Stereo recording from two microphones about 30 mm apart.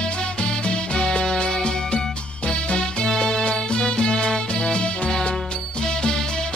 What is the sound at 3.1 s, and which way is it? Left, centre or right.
Music, left.